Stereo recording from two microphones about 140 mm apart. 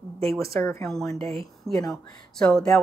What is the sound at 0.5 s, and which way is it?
Speech, 20° left (ahead or behind).